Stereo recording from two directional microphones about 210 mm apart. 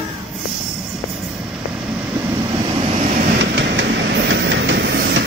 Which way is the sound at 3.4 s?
60° right (ahead or behind).